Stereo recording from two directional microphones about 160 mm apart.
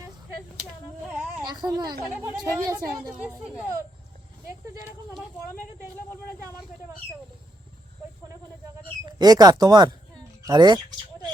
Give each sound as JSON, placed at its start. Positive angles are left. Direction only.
{"t": 1.5, "sound": "speech", "side_deg": -25}
{"t": 9.0, "sound": "speech", "side_deg": -25}